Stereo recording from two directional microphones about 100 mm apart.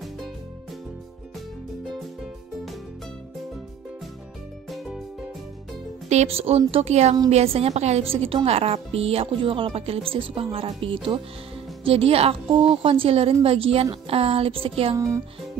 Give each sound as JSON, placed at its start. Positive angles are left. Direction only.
{"t": 4.6, "sound": "music", "side_deg": 0}
{"t": 6.0, "sound": "a woman's voice", "side_deg": -85}
{"t": 8.5, "sound": "speech", "side_deg": -90}
{"t": 15.0, "sound": "music", "side_deg": -30}